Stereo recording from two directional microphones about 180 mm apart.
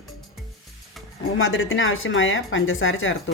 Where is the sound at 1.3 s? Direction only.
90° left.